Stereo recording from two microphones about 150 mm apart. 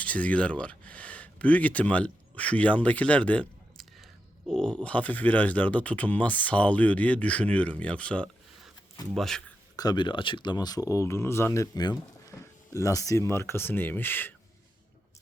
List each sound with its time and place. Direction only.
0.0 s speech: 10° left (ahead or behind)
9.7 s speech: 25° left (ahead or behind)